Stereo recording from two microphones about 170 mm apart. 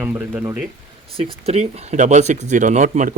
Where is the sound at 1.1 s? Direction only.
35° right (ahead or behind).